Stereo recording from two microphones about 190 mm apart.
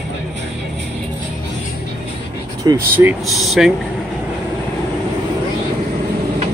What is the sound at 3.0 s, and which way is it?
Speech, 5° right (ahead or behind).